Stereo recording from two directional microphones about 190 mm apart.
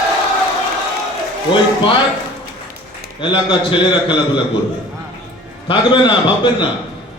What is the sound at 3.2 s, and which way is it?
Speech, 25° left (ahead or behind).